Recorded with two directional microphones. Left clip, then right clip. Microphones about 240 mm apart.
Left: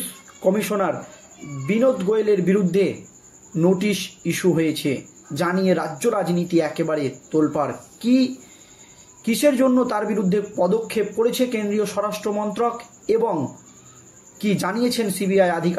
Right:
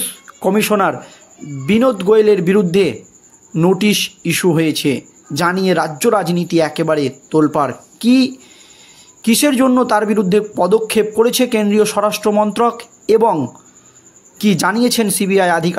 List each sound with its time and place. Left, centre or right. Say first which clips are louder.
0.4 s speech: right 6 dB; right
14.4 s speech: right 8 dB; right